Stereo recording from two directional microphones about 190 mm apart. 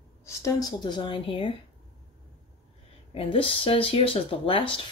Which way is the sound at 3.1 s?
30° left (ahead or behind).